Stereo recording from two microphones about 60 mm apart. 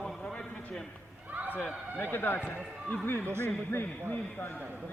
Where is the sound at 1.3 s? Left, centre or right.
Right.